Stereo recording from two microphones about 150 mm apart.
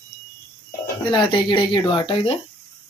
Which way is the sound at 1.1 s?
30° left (ahead or behind).